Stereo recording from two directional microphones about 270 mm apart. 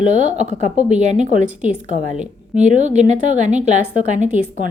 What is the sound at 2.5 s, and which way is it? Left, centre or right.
A woman's voice, right.